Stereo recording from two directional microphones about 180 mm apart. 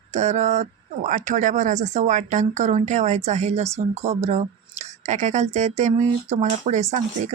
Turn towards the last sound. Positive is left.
turn(degrees=-40)  # may be behind; listen again after turning